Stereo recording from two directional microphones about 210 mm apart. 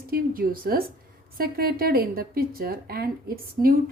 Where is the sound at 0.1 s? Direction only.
45° right (ahead or behind).